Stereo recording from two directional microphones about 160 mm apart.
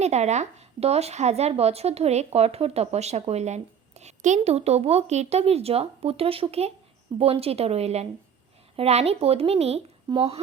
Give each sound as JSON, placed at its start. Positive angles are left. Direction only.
{"t": 0.0, "sound": "a woman's voice", "side_deg": -45}